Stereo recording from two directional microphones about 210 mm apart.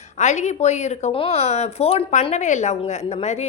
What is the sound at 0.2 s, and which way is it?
Speech, 35° left (ahead or behind).